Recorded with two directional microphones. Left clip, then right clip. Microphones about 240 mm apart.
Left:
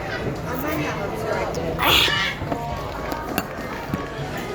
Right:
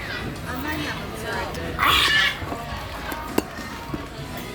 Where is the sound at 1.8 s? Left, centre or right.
Centre.